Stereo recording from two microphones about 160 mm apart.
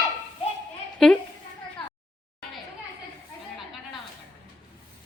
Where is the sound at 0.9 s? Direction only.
5° left (ahead or behind).